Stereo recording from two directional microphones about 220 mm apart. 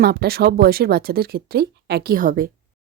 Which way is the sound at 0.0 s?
45° right (ahead or behind).